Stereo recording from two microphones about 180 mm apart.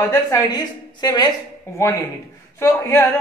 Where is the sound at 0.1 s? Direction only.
20° left (ahead or behind).